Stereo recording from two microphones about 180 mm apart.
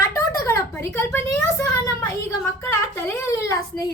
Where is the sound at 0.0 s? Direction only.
15° left (ahead or behind).